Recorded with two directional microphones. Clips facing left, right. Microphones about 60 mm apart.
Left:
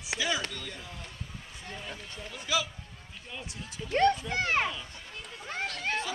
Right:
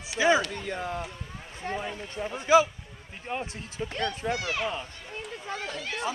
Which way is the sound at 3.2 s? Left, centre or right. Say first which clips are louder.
Right 9 dB; right.